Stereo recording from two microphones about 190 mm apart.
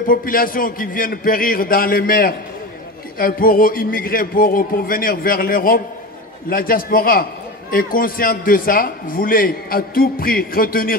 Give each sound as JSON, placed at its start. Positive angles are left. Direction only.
{"t": 0.0, "sound": "a man's voice", "side_deg": 50}